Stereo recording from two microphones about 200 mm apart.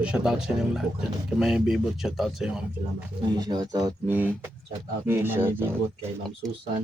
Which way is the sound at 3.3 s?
20° right (ahead or behind).